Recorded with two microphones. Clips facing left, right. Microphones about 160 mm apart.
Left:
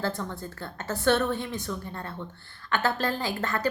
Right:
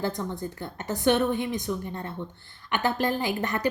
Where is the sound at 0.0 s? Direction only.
15° right (ahead or behind).